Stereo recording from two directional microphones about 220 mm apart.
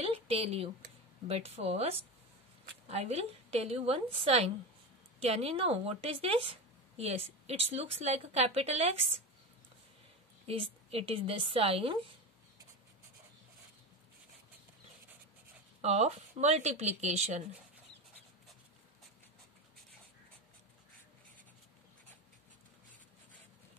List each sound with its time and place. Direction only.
0.0 s a sound: 25° right (ahead or behind)
1.2 s a woman's voice: 25° right (ahead or behind)
10.4 s a woman's voice: 25° right (ahead or behind)
15.8 s a woman's voice: 30° right (ahead or behind)